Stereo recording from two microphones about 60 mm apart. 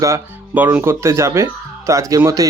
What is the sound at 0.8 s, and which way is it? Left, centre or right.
Speech, right.